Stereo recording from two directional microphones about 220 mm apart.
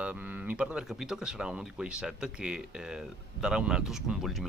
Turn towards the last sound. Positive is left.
turn(degrees=0)  # may be behind; listen again after turning